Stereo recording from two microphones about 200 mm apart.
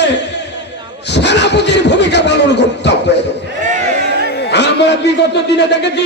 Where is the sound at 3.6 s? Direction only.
35° right (ahead or behind).